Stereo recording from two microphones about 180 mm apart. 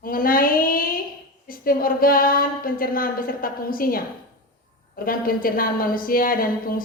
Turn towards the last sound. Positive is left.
turn(degrees=55)  # may be behind; listen again after turning